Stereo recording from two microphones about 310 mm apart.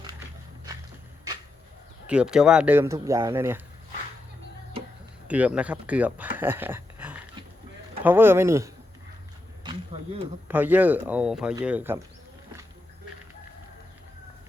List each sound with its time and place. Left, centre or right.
2.0 s speech: centre
5.3 s speech: centre
9.6 s a sound: centre
10.5 s speech: centre